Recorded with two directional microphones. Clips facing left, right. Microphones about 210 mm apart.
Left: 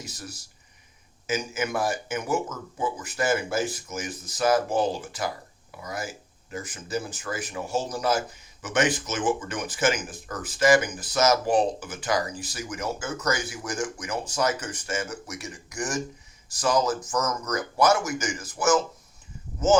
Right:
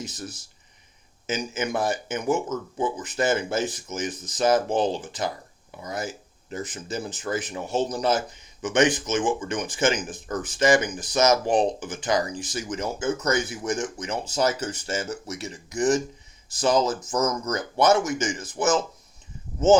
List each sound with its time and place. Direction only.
0.0 s speech: 20° right (ahead or behind)
1.3 s speech: 20° right (ahead or behind)